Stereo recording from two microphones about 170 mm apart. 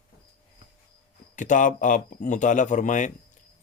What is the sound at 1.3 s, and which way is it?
Speech, 50° left (ahead or behind).